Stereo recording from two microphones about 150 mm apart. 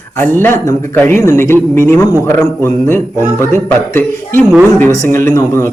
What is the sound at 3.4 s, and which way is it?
Speech, 15° left (ahead or behind).